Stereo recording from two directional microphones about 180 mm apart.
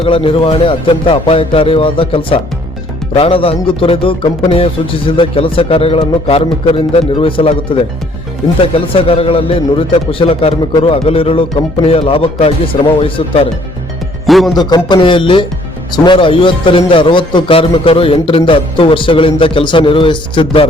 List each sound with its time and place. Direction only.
0.0 s a man's voice: 30° left (ahead or behind)
8.6 s a man's voice: 30° left (ahead or behind)
14.3 s speech: centre (ahead or behind)
14.5 s a man's voice: 25° left (ahead or behind)